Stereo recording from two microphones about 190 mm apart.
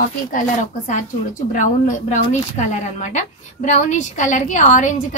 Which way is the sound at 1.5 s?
40° left (ahead or behind).